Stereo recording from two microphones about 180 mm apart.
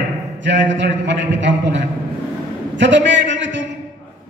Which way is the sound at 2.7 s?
85° right.